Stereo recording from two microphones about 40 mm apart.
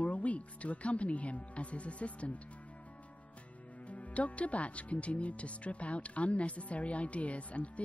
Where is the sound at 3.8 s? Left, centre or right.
Left.